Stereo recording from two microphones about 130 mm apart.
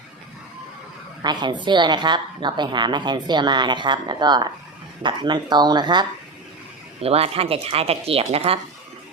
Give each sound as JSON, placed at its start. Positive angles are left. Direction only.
{"t": 1.2, "sound": "a woman's voice", "side_deg": -35}
{"t": 7.0, "sound": "speech", "side_deg": -50}